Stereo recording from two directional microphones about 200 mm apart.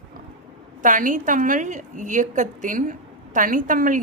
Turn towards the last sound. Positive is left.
turn(degrees=-40)  # may be behind; listen again after turning